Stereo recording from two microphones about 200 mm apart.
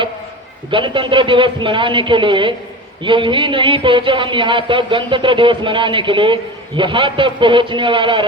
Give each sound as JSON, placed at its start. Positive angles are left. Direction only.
{"t": 0.7, "sound": "speech", "side_deg": -25}